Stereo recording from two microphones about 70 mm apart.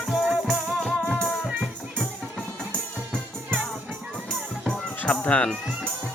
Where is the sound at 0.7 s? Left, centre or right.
Centre.